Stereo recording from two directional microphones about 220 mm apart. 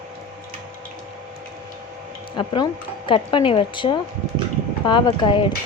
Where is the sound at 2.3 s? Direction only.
20° left (ahead or behind).